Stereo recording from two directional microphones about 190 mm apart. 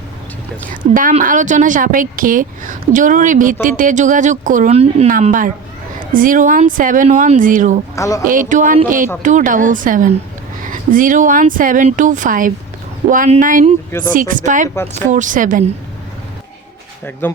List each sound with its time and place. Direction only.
1.2 s a woman's voice: 45° right (ahead or behind)
5.1 s a woman's voice: 45° right (ahead or behind)
7.9 s speech: 15° left (ahead or behind)
8.3 s a woman's voice: 45° right (ahead or behind)
17.2 s speech: 10° left (ahead or behind)